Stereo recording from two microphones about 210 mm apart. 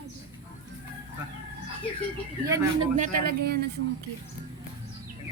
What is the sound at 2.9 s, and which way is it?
Speech, 35° right (ahead or behind).